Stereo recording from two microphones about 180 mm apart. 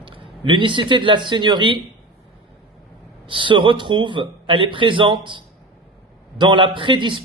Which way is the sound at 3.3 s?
25° right (ahead or behind).